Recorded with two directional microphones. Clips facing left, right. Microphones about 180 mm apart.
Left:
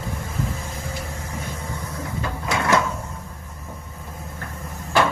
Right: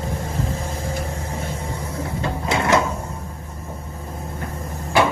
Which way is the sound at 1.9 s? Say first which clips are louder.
Right 4 dB; 25° right (ahead or behind).